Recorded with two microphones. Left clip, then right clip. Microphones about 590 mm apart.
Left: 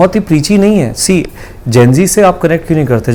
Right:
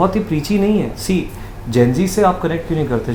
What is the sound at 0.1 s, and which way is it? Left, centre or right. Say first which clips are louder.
Speech: left 8 dB; left.